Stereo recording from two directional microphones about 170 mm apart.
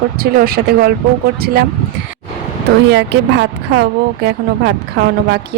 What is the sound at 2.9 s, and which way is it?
Speech, 85° right.